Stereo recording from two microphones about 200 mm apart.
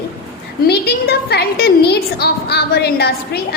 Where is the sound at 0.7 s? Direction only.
55° left (ahead or behind).